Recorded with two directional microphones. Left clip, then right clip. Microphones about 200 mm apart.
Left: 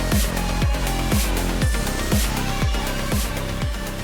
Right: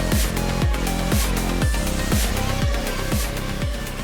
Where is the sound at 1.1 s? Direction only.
Centre (ahead or behind).